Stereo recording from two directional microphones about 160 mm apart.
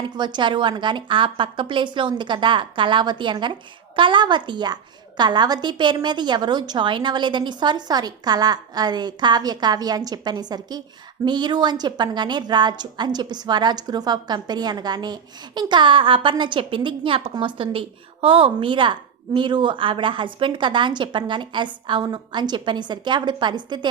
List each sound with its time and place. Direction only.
0.0 s a woman's voice: 30° right (ahead or behind)